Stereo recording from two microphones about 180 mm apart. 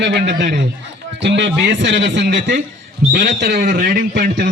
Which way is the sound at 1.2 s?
75° right (ahead or behind).